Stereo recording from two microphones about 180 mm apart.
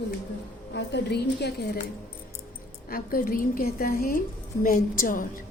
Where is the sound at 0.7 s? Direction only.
70° left (ahead or behind).